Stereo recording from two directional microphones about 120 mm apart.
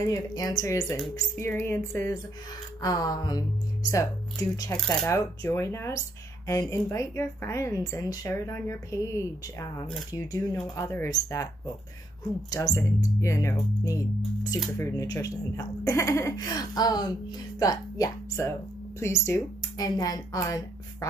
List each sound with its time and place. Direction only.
0.0 s speech: 30° left (ahead or behind)
12.4 s speech: 30° left (ahead or behind)